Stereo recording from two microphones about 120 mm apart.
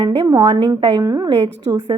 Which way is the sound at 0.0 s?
50° right (ahead or behind).